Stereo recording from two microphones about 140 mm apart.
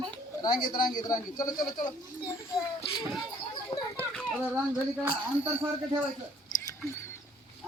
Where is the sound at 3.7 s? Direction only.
40° left (ahead or behind).